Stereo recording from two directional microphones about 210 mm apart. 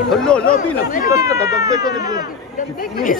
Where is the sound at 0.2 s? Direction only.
5° left (ahead or behind).